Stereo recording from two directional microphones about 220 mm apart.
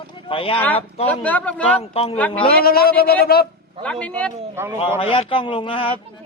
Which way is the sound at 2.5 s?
45° left (ahead or behind).